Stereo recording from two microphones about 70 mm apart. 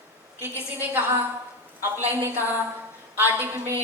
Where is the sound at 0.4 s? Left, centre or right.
Right.